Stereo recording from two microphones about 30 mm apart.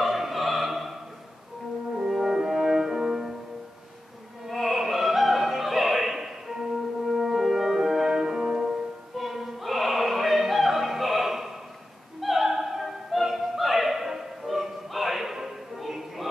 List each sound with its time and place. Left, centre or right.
0.0 s opera: centre
2.0 s french horn: centre
3.1 s music: centre
4.5 s opera: centre
7.2 s french horn: centre
8.4 s music: centre
9.2 s opera: centre
15.3 s music: centre